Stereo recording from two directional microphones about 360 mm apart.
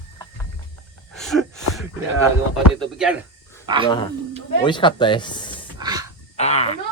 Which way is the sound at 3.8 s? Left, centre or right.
Centre.